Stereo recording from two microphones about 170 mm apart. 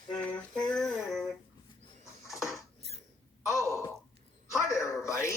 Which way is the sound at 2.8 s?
40° right (ahead or behind).